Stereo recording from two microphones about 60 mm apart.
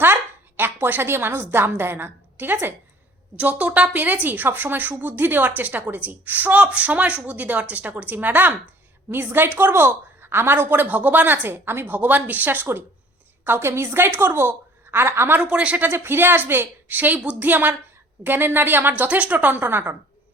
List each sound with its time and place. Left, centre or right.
0.0 s speech: right
3.3 s a woman's voice: right
11.9 s a woman's voice: right
15.4 s speech: centre
15.9 s a woman's voice: right
19.0 s speech: right